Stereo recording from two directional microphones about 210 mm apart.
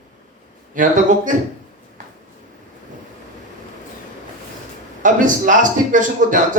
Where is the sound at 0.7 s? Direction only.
40° right (ahead or behind).